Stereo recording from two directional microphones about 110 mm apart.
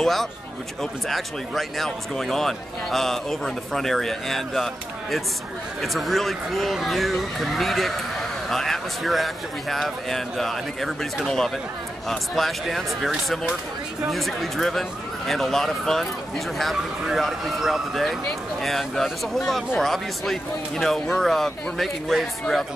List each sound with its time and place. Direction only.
0.0 s speech: 5° left (ahead or behind)
5.8 s speech: centre (ahead or behind)